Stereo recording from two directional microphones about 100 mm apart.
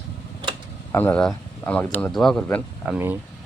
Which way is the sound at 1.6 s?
15° left (ahead or behind).